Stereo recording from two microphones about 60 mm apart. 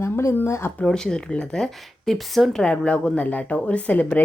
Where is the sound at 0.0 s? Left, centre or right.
Left.